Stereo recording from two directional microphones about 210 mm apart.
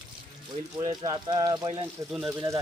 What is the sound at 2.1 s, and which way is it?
Speech, 10° right (ahead or behind).